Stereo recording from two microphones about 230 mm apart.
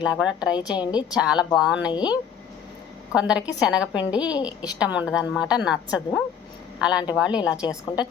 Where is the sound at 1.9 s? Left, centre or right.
Centre.